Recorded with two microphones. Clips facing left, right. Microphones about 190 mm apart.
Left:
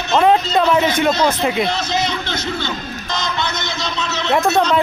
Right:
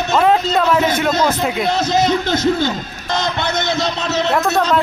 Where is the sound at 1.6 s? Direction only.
45° right (ahead or behind).